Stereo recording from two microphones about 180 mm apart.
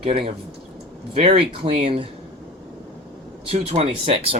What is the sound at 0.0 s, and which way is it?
Speech, 30° right (ahead or behind).